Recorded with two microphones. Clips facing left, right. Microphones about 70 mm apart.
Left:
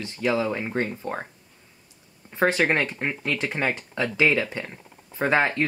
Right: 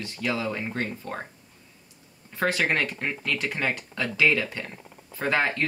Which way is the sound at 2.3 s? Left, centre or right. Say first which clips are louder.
Left 3 dB; left.